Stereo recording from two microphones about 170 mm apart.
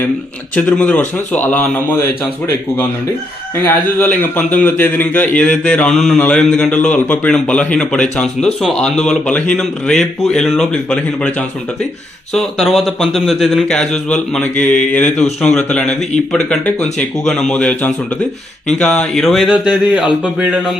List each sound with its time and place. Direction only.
0.5 s a man's voice: 5° left (ahead or behind)
3.5 s a man's voice: 10° left (ahead or behind); by 20.7 s 5° right (ahead or behind)